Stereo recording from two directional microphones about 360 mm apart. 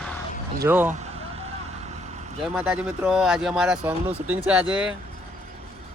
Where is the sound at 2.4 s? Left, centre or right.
Centre.